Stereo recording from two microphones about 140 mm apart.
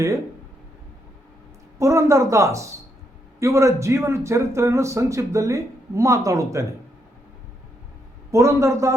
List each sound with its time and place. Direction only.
1.8 s a man's voice: 20° right (ahead or behind)
8.3 s a man's voice: 20° right (ahead or behind)